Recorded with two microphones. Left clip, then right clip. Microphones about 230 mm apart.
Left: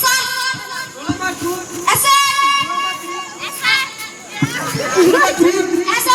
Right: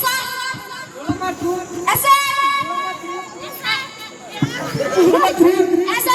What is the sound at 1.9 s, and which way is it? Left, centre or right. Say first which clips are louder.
Music: left 2 dB; left.